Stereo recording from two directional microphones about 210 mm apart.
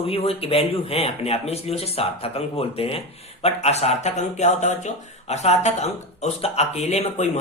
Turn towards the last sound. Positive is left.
turn(degrees=30)  # may be behind; listen again after turning